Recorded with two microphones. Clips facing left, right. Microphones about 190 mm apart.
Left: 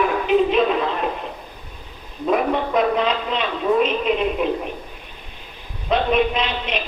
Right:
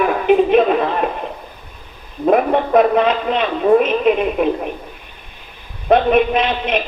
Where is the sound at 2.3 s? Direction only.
55° right (ahead or behind).